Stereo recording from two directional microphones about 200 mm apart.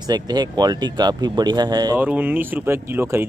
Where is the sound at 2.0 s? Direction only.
10° right (ahead or behind).